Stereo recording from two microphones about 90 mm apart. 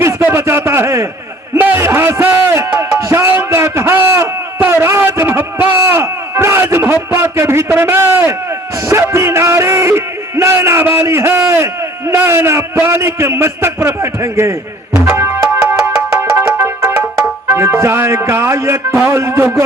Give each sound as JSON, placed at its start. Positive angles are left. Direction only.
{"t": 0.2, "sound": "a sound", "side_deg": -25}
{"t": 2.7, "sound": "music", "side_deg": -30}
{"t": 8.9, "sound": "a sound", "side_deg": -30}
{"t": 15.0, "sound": "music", "side_deg": -35}
{"t": 16.0, "sound": "music", "side_deg": -10}
{"t": 16.4, "sound": "music", "side_deg": -30}